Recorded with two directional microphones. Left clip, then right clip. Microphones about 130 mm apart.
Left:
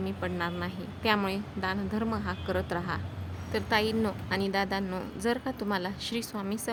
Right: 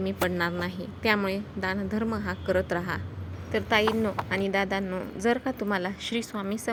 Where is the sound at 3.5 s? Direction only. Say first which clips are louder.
Right 4 dB; 15° right (ahead or behind).